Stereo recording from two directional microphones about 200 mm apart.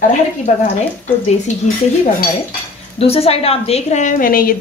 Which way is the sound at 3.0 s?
30° left (ahead or behind).